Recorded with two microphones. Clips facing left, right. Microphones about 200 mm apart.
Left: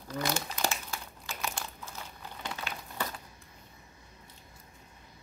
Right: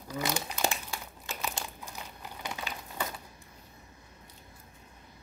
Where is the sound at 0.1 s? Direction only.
15° right (ahead or behind).